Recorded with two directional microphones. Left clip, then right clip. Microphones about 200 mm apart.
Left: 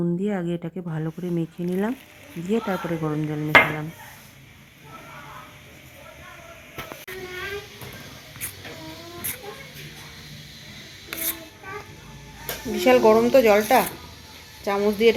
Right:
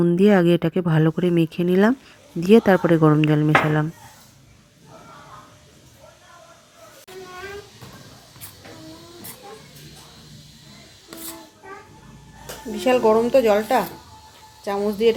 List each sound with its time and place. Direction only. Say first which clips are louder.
0.0 s speech: right 10 dB; 15° right (ahead or behind)
12.7 s speech: left 1 dB; centre (ahead or behind)